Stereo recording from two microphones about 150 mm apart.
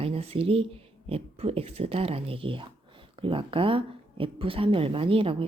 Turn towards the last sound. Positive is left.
turn(degrees=-35)  # may be behind; listen again after turning